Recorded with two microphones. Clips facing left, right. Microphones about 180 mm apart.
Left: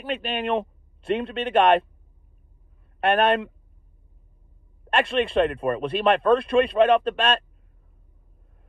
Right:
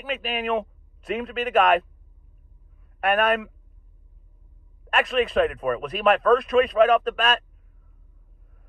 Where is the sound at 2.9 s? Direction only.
25° left (ahead or behind).